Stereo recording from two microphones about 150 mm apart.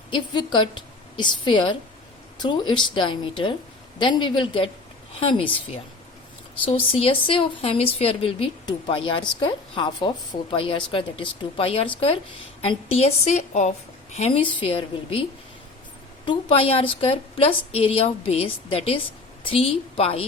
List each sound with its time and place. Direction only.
0.1 s a woman's voice: 35° left (ahead or behind)